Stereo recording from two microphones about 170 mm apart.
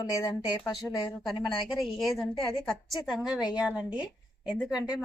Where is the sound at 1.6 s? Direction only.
Centre (ahead or behind).